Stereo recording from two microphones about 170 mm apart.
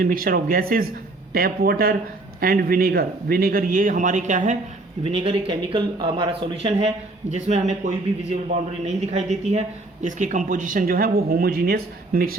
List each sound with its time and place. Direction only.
0.0 s a man's voice: 55° right (ahead or behind); by 7.8 s 40° right (ahead or behind)
9.0 s speech: 40° right (ahead or behind); by 12.4 s 60° right (ahead or behind)